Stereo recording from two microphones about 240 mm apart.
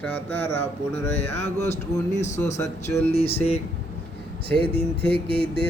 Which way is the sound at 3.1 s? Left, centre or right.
Left.